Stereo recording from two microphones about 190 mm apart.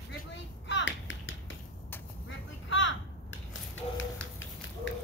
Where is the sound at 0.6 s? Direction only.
75° left (ahead or behind).